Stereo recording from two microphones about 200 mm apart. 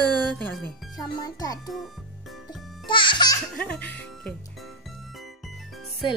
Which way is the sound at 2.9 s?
25° left (ahead or behind).